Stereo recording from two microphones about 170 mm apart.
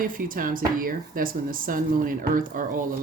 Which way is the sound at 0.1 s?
55° right (ahead or behind).